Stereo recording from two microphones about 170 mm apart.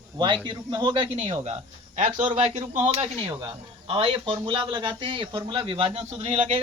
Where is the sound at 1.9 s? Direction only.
45° right (ahead or behind).